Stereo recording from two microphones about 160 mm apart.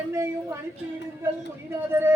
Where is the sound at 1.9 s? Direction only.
15° right (ahead or behind).